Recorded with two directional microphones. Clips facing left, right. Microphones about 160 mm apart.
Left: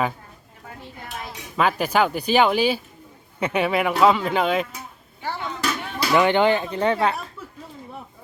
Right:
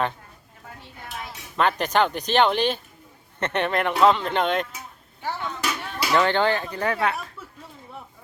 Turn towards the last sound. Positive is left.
turn(degrees=30)  # may be behind; listen again after turning